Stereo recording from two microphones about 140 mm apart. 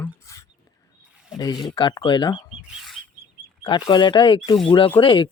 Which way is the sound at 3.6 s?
35° left (ahead or behind).